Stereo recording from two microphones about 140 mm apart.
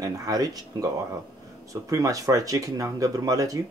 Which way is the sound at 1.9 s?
25° right (ahead or behind).